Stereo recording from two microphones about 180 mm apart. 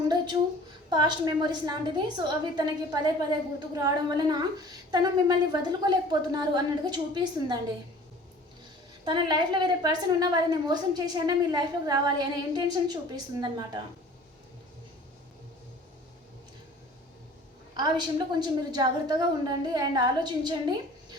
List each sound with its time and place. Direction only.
0.9 s a woman's voice: 25° right (ahead or behind)
9.0 s a woman's voice: 25° right (ahead or behind)
17.7 s a woman's voice: 25° right (ahead or behind)